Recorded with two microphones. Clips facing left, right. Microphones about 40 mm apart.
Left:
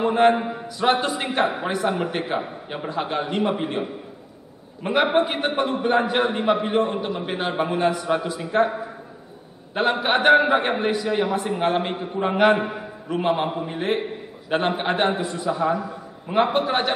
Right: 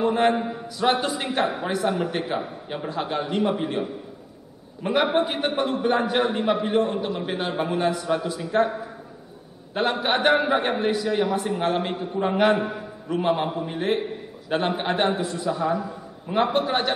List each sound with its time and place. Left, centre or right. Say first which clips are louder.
0.0 s a man's voice: left 3 dB; centre
0.7 s a man's voice: left 2 dB; centre
9.8 s a man's voice: left 2 dB; centre